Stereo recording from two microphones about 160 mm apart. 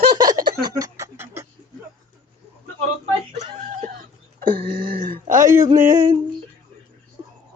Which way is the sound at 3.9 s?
65° right (ahead or behind).